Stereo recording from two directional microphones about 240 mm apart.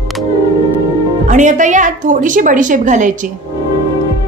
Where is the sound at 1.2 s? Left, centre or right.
Right.